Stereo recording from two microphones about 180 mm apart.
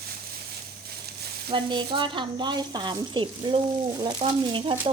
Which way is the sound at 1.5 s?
25° right (ahead or behind).